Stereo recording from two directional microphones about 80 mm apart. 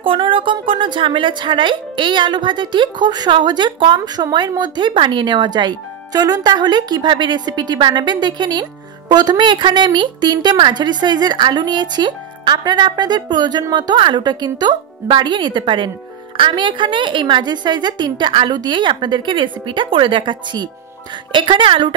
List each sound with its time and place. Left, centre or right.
0.0 s a woman's voice: right
21.3 s a woman's voice: right